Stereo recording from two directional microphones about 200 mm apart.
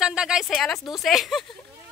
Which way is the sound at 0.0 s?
5° right (ahead or behind).